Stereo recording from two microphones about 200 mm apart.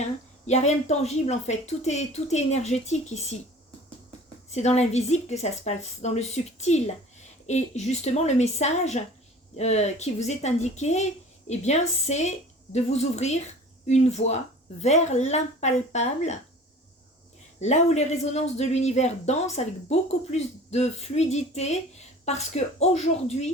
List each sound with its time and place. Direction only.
0.0 s speech: 35° left (ahead or behind)
4.5 s speech: 35° left (ahead or behind)
17.6 s speech: 35° left (ahead or behind)